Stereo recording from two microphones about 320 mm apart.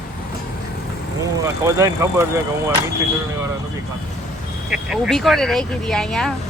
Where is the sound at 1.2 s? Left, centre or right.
Centre.